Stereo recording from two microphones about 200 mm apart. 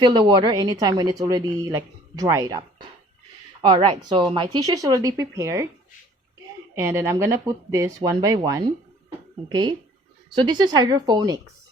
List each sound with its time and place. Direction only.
0.0 s speech: 20° right (ahead or behind)
6.7 s speech: 10° right (ahead or behind)